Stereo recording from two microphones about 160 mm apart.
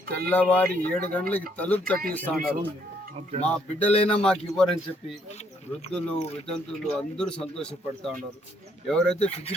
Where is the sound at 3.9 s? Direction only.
40° left (ahead or behind).